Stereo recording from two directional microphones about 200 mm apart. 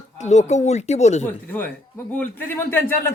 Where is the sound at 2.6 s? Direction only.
10° left (ahead or behind).